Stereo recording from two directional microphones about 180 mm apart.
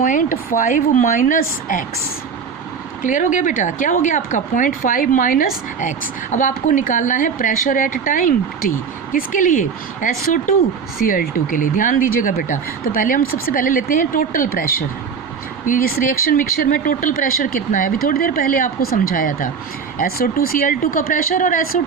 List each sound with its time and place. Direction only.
0.0 s speech: 45° left (ahead or behind)
3.0 s speech: 45° left (ahead or behind)